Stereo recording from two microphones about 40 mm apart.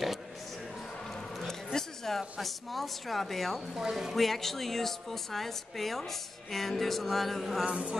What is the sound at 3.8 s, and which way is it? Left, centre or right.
Speech, centre.